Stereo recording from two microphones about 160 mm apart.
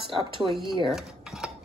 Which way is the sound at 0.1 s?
30° right (ahead or behind).